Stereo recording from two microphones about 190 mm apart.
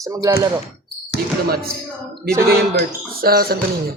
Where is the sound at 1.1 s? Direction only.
60° left (ahead or behind).